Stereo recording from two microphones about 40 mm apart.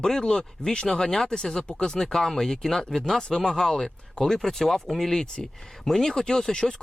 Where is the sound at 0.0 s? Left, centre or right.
Centre.